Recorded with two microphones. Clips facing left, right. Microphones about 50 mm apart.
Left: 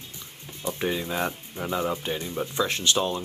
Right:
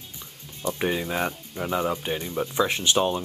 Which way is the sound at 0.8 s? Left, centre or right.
Centre.